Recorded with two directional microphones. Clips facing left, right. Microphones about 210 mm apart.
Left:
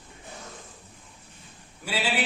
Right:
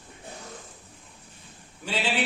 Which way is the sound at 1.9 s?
10° left (ahead or behind).